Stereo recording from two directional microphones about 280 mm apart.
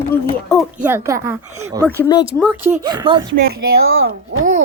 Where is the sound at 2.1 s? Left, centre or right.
Centre.